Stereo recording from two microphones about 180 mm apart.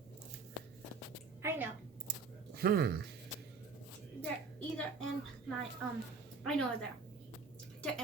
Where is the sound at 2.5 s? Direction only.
60° right (ahead or behind).